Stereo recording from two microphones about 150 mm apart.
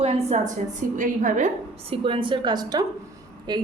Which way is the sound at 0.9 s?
60° right (ahead or behind).